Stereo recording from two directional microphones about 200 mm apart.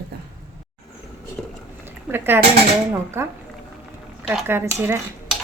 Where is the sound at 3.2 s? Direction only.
15° right (ahead or behind).